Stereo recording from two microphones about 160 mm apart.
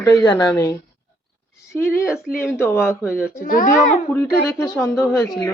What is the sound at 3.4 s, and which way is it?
Speech, 55° left (ahead or behind).